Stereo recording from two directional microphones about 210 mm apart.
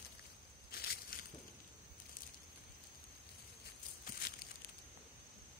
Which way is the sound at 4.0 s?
45° left (ahead or behind).